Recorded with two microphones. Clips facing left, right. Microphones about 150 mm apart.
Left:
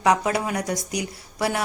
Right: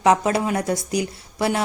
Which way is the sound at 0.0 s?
25° right (ahead or behind).